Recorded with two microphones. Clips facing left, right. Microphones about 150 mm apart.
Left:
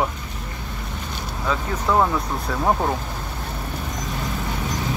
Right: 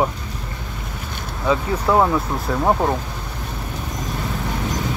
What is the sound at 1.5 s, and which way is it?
Speech, 10° right (ahead or behind).